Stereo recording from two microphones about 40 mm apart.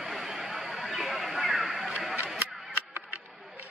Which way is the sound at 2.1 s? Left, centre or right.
Right.